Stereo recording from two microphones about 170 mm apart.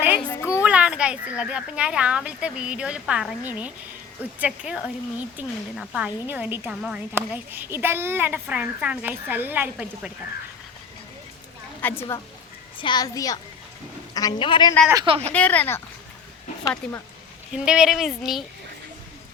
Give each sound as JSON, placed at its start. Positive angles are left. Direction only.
{"t": 0.3, "sound": "a sound", "side_deg": 15}
{"t": 0.6, "sound": "speech", "side_deg": -5}
{"t": 11.8, "sound": "a woman's voice", "side_deg": 10}
{"t": 12.7, "sound": "a child's voice", "side_deg": 25}
{"t": 14.9, "sound": "speech", "side_deg": -30}
{"t": 15.3, "sound": "speech", "side_deg": 10}
{"t": 16.8, "sound": "speech", "side_deg": 5}